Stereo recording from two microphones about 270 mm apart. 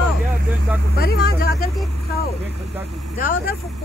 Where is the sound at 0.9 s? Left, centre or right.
Left.